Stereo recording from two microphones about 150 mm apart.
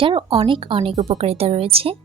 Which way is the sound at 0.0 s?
35° right (ahead or behind).